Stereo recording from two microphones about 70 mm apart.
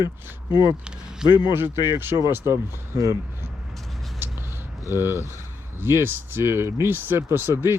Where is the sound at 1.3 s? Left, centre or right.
Left.